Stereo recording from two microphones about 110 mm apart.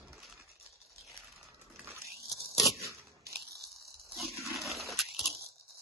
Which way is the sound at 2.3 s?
Centre (ahead or behind).